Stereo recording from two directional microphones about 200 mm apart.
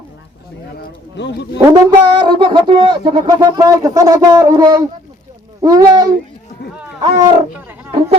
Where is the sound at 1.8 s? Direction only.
25° right (ahead or behind).